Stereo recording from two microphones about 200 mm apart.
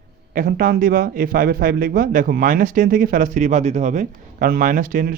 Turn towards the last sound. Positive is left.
turn(degrees=-45)  # may be behind; listen again after turning